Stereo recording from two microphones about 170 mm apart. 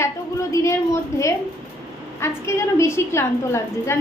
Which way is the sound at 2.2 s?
15° left (ahead or behind).